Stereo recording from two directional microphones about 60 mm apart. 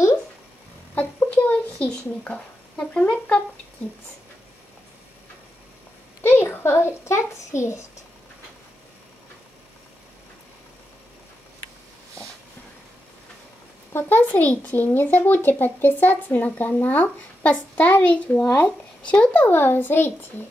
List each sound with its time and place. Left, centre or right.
0.9 s a sound: left
6.2 s a child's voice: left
13.9 s a child's voice: left
19.3 s a child's voice: left